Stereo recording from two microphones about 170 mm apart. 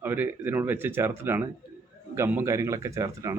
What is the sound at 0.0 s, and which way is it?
Speech, 10° right (ahead or behind).